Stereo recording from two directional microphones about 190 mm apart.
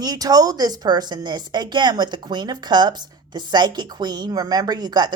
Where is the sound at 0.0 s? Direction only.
20° right (ahead or behind).